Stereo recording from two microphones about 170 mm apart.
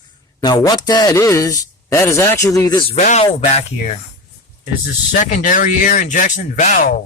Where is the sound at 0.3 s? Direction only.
20° left (ahead or behind).